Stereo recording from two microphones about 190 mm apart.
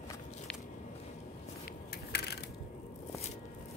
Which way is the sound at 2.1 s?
60° left (ahead or behind).